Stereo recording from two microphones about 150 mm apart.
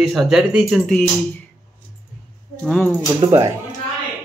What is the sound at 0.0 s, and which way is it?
Speech, 5° right (ahead or behind).